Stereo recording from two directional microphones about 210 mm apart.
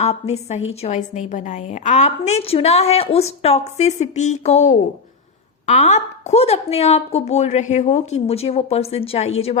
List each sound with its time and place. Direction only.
0.0 s a woman's voice: 30° left (ahead or behind)